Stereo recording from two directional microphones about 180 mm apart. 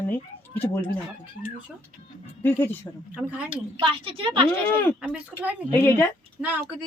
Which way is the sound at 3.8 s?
30° right (ahead or behind).